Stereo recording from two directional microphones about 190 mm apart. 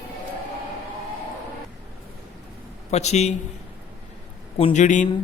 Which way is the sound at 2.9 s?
35° left (ahead or behind).